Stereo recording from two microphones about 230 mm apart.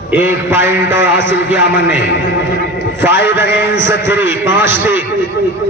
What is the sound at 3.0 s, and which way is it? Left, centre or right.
A man's voice, centre.